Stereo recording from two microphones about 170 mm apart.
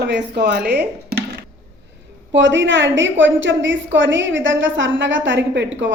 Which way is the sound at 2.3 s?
90° right.